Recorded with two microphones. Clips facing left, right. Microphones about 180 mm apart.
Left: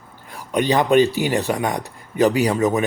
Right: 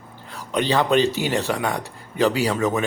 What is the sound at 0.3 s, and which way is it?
Speech, 15° left (ahead or behind).